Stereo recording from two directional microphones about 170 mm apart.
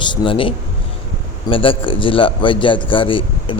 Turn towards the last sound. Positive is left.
turn(degrees=30)  # may be behind; listen again after turning